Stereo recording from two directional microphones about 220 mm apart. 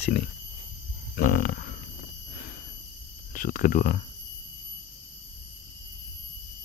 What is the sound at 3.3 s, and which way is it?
Speech, 40° left (ahead or behind).